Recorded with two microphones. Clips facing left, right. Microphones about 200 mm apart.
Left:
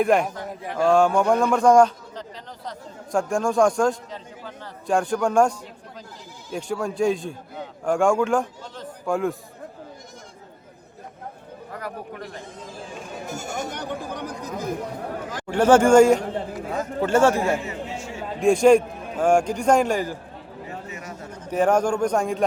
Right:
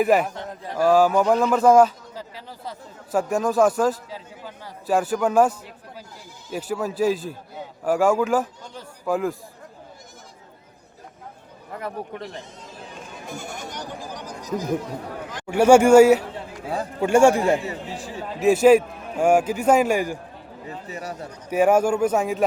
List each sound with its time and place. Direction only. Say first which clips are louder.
0.0 s a man's voice: right 1 dB; 5° right (ahead or behind)
13.2 s speech: left 1 dB; 45° left (ahead or behind)
13.7 s speech: left 4 dB; 60° left (ahead or behind)
15.4 s a man's voice: right 2 dB; 10° right (ahead or behind)
16.6 s speech: right 5 dB; 30° right (ahead or behind)
17.0 s a man's voice: right 3 dB; 10° right (ahead or behind)
17.6 s chatter: even; 35° right (ahead or behind)
18.3 s a man's voice: right 1 dB; 5° right (ahead or behind)
20.8 s speech: right 3 dB; 35° right (ahead or behind)
21.5 s a man's voice: right 2 dB; 10° right (ahead or behind)